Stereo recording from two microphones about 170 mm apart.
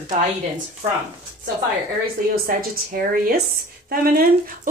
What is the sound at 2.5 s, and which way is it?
Speech, 55° right (ahead or behind).